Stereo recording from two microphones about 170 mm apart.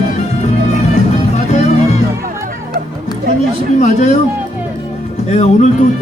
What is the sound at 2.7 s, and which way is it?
Music, 65° right (ahead or behind).